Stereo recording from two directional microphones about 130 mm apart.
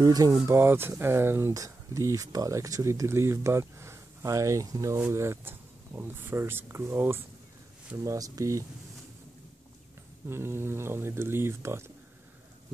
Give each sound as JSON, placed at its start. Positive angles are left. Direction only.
{"t": 0.0, "sound": "speech", "side_deg": -30}
{"t": 10.2, "sound": "speech", "side_deg": -20}